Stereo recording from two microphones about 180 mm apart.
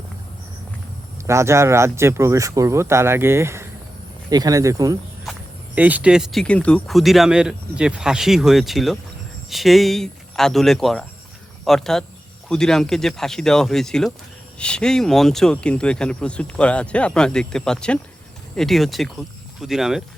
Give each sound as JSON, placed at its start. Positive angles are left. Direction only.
{"t": 1.3, "sound": "speech", "side_deg": -15}
{"t": 5.2, "sound": "speech", "side_deg": -5}